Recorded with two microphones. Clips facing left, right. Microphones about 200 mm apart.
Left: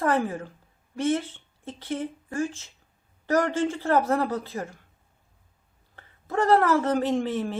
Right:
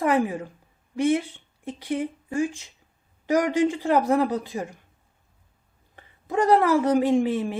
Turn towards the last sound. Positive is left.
turn(degrees=-15)  # may be behind; listen again after turning